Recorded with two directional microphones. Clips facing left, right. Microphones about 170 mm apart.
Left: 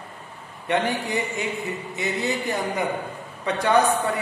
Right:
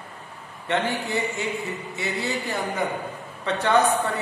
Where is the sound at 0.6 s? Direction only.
15° left (ahead or behind).